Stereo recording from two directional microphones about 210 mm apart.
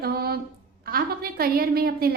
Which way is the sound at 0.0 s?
45° right (ahead or behind).